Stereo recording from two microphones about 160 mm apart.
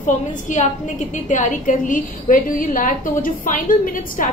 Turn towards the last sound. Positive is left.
turn(degrees=55)  # may be behind; listen again after turning